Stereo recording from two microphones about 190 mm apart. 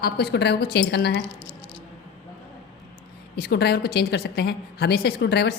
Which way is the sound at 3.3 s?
55° left (ahead or behind).